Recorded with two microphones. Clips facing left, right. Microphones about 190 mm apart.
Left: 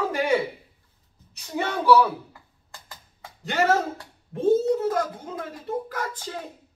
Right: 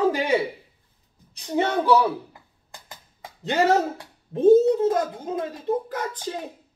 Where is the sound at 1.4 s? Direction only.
25° right (ahead or behind).